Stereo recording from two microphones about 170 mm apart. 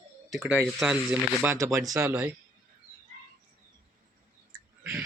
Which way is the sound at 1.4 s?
15° right (ahead or behind).